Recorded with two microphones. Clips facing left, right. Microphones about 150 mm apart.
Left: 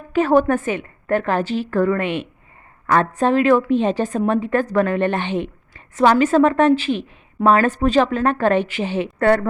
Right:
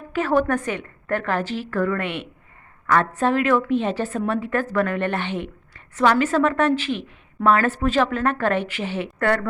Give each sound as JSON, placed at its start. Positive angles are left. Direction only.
{"t": 0.2, "sound": "speech", "side_deg": 20}
{"t": 3.2, "sound": "a woman's voice", "side_deg": 25}